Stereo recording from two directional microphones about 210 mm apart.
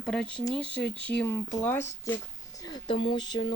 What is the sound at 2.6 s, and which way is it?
Speech, 20° left (ahead or behind).